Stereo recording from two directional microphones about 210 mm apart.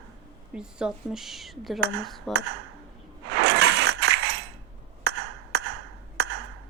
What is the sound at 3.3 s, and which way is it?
Coin, 55° right (ahead or behind).